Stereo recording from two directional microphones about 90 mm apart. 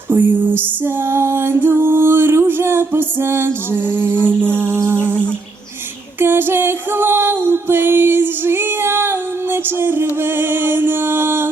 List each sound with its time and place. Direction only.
0.1 s music: 25° right (ahead or behind)
4.8 s a sound: 25° right (ahead or behind)
6.1 s music: 25° right (ahead or behind)